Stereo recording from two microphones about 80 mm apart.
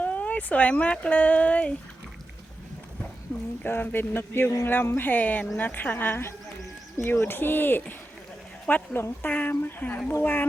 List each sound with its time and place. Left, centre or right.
0.0 s speech: centre
3.6 s speech: left